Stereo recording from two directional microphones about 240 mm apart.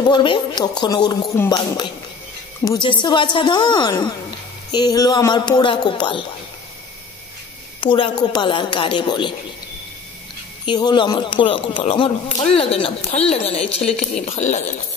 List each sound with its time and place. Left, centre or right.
0.0 s speech: centre
2.6 s speech: centre
7.8 s speech: left
10.6 s speech: centre